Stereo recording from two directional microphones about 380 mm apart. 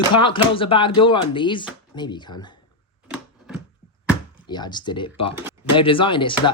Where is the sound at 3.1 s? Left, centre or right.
Centre.